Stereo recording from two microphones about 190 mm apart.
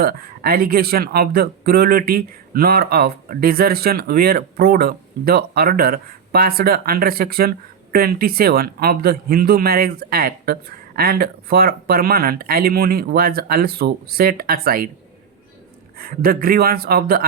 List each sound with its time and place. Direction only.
0.0 s speech: 50° right (ahead or behind)
16.0 s speech: 50° right (ahead or behind)